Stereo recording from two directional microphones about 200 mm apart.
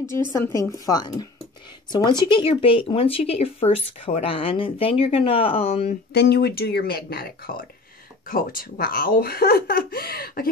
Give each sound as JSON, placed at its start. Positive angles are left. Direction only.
{"t": 0.1, "sound": "speech", "side_deg": 10}
{"t": 6.1, "sound": "speech", "side_deg": 50}